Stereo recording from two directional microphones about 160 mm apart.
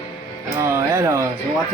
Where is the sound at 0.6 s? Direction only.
20° right (ahead or behind).